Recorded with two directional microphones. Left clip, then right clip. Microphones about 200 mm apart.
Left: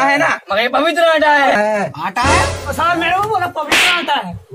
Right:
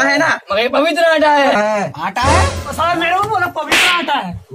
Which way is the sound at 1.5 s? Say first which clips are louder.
Even; 10° left (ahead or behind).